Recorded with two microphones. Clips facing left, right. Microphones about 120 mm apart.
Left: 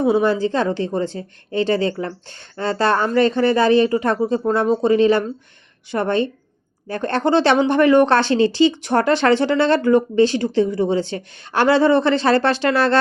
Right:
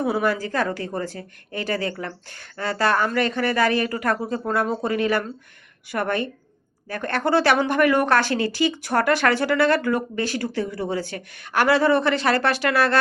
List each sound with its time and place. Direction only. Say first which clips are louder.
0.0 s speech: left 6 dB; 25° left (ahead or behind)